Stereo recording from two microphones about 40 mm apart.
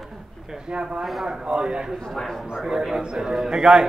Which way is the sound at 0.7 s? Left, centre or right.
Right.